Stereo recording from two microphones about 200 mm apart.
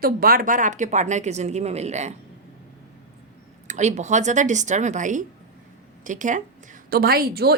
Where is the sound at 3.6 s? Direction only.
35° right (ahead or behind).